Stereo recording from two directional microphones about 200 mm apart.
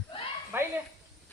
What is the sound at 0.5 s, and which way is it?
Bow-wow, 10° right (ahead or behind).